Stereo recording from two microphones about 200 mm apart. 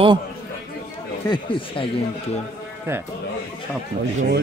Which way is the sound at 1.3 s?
25° left (ahead or behind).